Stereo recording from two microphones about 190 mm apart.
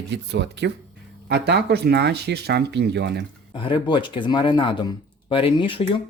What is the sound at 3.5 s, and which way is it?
Speech, 25° left (ahead or behind).